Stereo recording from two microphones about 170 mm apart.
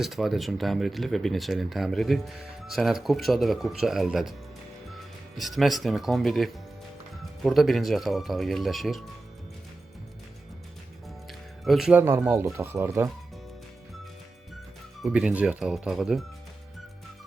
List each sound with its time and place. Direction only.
0.0 s speech: centre (ahead or behind)
11.3 s music: centre (ahead or behind)
12.5 s speech: 15° right (ahead or behind)
15.0 s speech: 5° right (ahead or behind)